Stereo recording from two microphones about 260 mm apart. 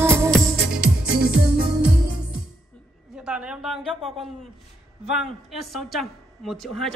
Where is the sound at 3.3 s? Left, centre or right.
Centre.